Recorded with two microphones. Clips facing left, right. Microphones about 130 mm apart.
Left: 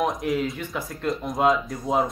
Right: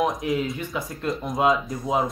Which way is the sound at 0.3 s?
Centre (ahead or behind).